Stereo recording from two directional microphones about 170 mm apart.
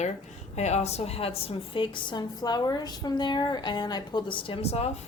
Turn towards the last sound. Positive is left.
turn(degrees=35)  # may be behind; listen again after turning